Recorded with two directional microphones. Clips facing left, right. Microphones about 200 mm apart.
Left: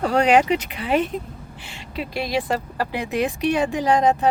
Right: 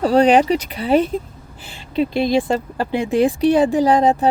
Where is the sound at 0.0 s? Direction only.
35° right (ahead or behind).